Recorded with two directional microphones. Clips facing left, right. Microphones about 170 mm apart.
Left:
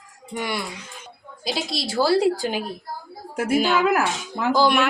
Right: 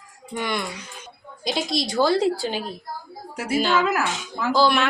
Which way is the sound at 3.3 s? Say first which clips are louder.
Left 4 dB; 50° left (ahead or behind).